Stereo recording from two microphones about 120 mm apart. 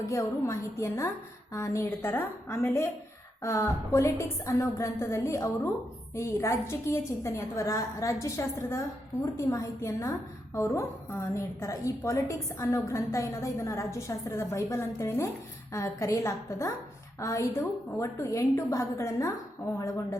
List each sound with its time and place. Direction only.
0.0 s a woman's voice: 25° left (ahead or behind)